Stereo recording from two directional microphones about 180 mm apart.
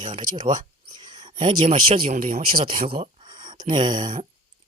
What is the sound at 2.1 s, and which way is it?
Speech, 50° right (ahead or behind).